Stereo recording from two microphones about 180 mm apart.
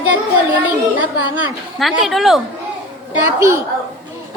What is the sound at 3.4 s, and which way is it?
Speech, 15° right (ahead or behind).